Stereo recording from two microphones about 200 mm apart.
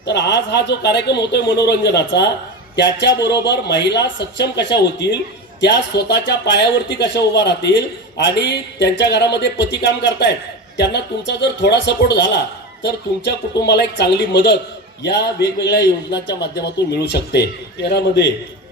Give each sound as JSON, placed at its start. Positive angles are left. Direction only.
{"t": 0.1, "sound": "a man's voice", "side_deg": 60}